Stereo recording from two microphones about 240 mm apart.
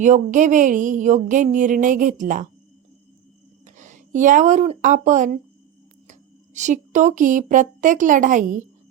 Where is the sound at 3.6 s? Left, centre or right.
Right.